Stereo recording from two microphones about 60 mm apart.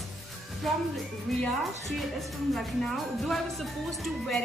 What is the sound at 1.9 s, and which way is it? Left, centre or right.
Speech, centre.